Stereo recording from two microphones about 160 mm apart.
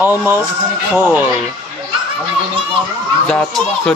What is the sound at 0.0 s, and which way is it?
Speech, 10° right (ahead or behind).